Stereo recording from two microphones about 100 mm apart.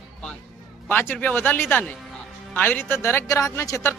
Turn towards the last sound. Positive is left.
turn(degrees=30)  # may be behind; listen again after turning